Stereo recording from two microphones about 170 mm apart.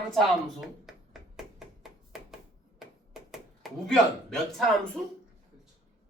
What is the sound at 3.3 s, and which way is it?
Speech, centre (ahead or behind).